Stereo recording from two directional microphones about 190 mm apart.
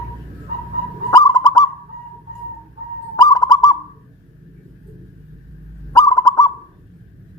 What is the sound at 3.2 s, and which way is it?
Bird, 20° left (ahead or behind).